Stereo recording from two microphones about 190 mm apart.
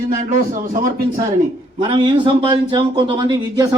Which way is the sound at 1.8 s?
25° right (ahead or behind).